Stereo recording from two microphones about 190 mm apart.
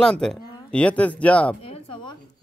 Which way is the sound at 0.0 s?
5° left (ahead or behind).